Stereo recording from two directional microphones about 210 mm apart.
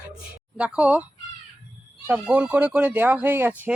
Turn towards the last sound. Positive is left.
turn(degrees=-10)  # may be behind; listen again after turning